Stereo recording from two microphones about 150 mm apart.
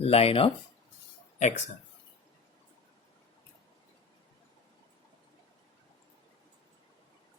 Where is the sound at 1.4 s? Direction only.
50° left (ahead or behind).